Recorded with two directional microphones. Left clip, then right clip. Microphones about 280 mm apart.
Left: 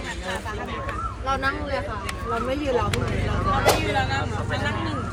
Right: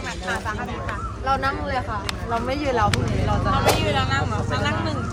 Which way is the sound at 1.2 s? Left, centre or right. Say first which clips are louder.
Right 3 dB; centre.